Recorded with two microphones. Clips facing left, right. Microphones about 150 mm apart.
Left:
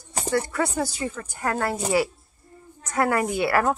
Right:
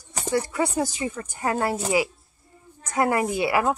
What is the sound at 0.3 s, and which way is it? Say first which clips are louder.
Speech: even; 10° right (ahead or behind).